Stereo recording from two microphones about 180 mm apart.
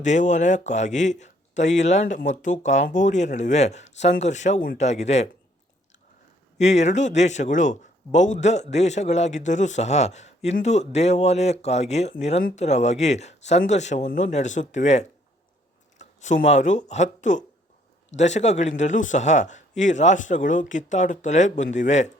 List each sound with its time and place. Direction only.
0.0 s speech: 40° left (ahead or behind)
6.6 s speech: 40° left (ahead or behind)